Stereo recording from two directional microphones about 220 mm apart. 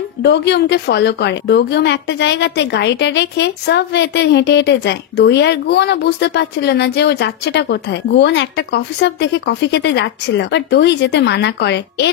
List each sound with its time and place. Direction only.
0.2 s a woman's voice: 50° left (ahead or behind)